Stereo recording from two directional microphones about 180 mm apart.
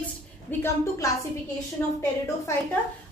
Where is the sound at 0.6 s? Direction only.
15° left (ahead or behind).